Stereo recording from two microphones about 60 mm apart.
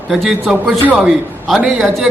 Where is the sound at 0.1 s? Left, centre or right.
Centre.